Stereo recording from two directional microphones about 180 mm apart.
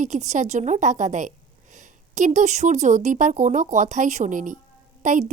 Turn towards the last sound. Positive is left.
turn(degrees=-45)  # may be behind; listen again after turning